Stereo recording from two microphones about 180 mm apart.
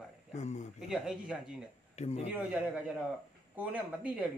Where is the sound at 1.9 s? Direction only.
35° left (ahead or behind).